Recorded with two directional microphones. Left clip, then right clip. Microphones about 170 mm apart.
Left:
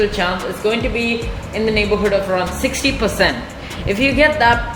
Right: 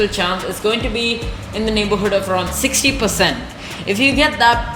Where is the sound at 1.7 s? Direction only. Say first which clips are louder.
Even; 25° right (ahead or behind).